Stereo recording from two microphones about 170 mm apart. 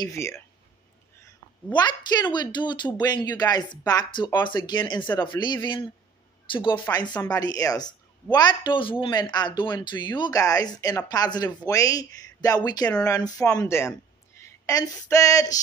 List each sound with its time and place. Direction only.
0.0 s speech: 15° left (ahead or behind)
1.7 s speech: 25° left (ahead or behind)